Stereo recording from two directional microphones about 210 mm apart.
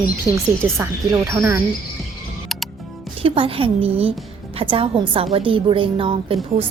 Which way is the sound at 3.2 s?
25° right (ahead or behind).